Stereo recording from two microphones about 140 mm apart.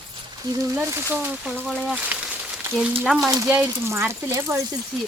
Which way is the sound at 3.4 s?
15° right (ahead or behind).